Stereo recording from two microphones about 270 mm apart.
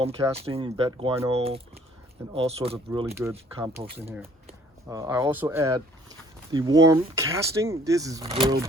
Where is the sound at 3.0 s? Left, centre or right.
Centre.